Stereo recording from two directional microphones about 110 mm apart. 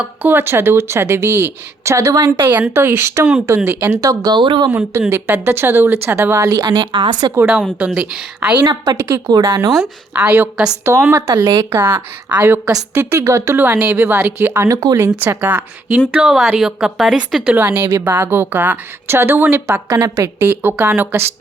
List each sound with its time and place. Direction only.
0.0 s speech: 15° right (ahead or behind); by 4.7 s 45° right (ahead or behind)
4.7 s speech: 20° right (ahead or behind); by 7.3 s 45° right (ahead or behind)
7.8 s a woman's voice: 5° right (ahead or behind)
8.6 s speech: 40° right (ahead or behind)
9.0 s speech: 25° right (ahead or behind)
10.2 s a woman's voice: 15° right (ahead or behind)